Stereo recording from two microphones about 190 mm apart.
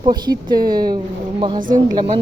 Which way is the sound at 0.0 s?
25° right (ahead or behind).